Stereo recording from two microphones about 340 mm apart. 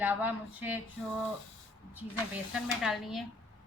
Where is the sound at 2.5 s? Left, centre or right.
Centre.